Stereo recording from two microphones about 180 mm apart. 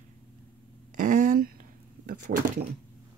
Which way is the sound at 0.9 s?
45° right (ahead or behind).